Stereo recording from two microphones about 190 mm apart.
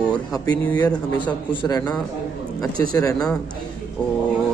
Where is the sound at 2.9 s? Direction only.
20° left (ahead or behind).